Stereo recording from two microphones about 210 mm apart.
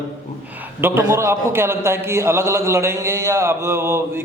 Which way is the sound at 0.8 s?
10° right (ahead or behind).